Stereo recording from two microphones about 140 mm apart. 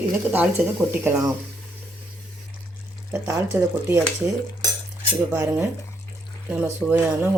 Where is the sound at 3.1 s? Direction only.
20° right (ahead or behind).